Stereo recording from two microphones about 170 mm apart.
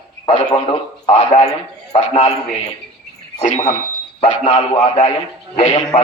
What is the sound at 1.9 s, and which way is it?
Speech, 40° left (ahead or behind).